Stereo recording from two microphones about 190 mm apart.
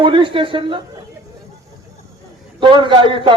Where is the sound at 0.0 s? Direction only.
25° right (ahead or behind).